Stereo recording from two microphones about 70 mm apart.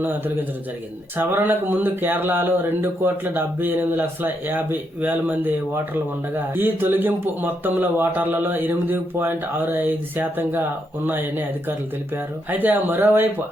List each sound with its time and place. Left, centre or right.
1.1 s speech: right